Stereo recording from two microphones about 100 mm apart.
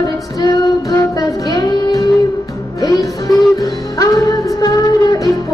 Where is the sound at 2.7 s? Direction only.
40° left (ahead or behind).